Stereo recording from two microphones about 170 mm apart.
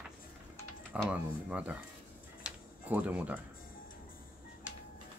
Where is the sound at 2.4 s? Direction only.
10° right (ahead or behind).